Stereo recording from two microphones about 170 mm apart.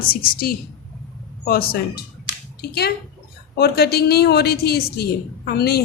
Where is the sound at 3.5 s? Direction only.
70° left (ahead or behind).